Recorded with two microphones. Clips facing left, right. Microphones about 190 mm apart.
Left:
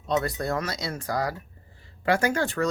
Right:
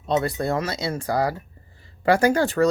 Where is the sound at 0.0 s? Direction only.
25° right (ahead or behind).